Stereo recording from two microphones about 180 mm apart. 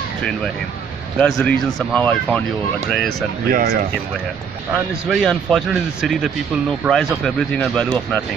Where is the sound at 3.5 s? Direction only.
60° right (ahead or behind).